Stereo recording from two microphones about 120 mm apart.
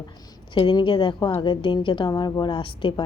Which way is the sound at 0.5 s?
40° left (ahead or behind).